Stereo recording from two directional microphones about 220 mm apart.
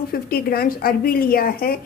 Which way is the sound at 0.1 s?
45° left (ahead or behind).